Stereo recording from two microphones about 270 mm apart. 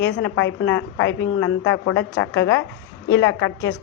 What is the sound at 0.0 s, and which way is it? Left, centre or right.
A woman's voice, left.